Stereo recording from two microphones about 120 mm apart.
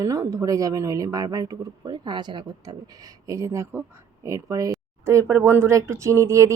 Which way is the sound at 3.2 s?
25° right (ahead or behind).